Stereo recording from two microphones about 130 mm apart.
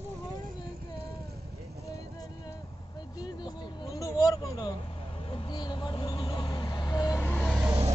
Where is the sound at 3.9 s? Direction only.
25° left (ahead or behind).